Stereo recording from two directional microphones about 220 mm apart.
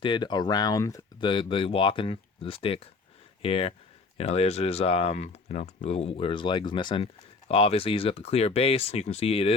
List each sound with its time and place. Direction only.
0.0 s speech: 20° left (ahead or behind)